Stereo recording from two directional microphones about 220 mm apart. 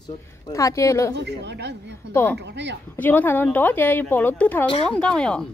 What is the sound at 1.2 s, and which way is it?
Speech, 50° right (ahead or behind).